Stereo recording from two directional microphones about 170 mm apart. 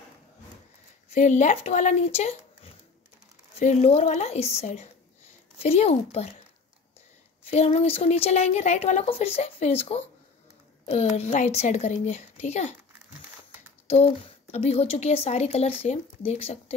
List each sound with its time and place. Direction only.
1.1 s speech: 45° left (ahead or behind)
7.4 s speech: 40° left (ahead or behind)
13.8 s speech: 35° left (ahead or behind)